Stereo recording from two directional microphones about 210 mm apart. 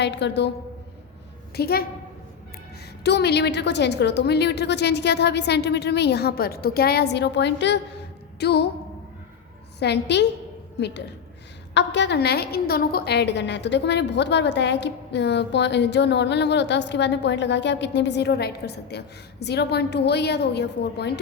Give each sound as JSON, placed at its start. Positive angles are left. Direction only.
{"t": 0.0, "sound": "a woman's voice", "side_deg": 55}
{"t": 1.5, "sound": "a woman's voice", "side_deg": 45}
{"t": 3.0, "sound": "a woman's voice", "side_deg": 50}
{"t": 9.8, "sound": "a woman's voice", "side_deg": 55}